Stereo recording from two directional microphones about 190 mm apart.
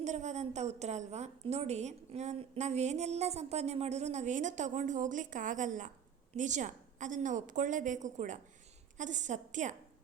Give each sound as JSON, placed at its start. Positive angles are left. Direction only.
{"t": 0.0, "sound": "a woman's voice", "side_deg": -40}